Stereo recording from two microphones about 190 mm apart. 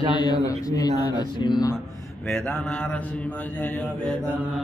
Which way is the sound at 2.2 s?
Centre (ahead or behind).